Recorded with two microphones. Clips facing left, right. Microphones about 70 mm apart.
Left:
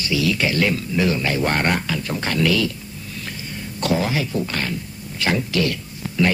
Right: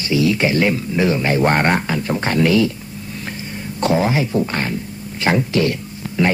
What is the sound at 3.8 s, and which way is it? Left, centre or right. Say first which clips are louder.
Speech: right 4 dB; right.